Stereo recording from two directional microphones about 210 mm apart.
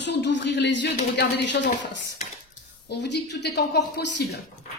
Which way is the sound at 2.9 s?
55° left (ahead or behind).